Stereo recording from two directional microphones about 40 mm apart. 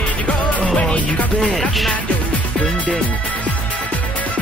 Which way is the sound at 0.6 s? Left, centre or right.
Left.